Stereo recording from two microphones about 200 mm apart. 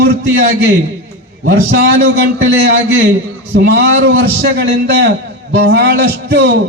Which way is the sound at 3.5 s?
55° right (ahead or behind).